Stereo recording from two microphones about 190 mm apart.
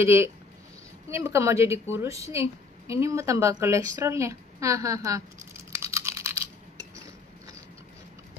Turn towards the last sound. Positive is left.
turn(degrees=-15)  # may be behind; listen again after turning